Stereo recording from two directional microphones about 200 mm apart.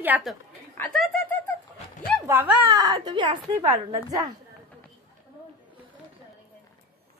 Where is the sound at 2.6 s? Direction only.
20° right (ahead or behind).